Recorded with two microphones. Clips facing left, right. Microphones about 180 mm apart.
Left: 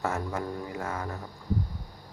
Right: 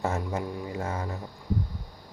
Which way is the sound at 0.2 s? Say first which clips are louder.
Right 1 dB; 20° right (ahead or behind).